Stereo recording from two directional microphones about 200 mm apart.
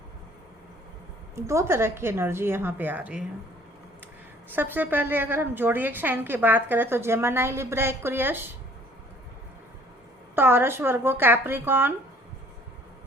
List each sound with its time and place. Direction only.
1.4 s a woman's voice: 15° right (ahead or behind)
4.5 s a woman's voice: 10° right (ahead or behind)
10.3 s a woman's voice: 10° right (ahead or behind)